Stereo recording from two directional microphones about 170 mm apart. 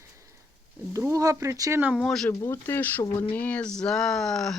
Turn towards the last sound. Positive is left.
turn(degrees=0)  # may be behind; listen again after turning